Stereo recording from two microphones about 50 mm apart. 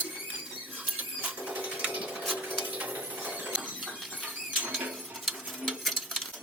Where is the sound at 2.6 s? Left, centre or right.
Right.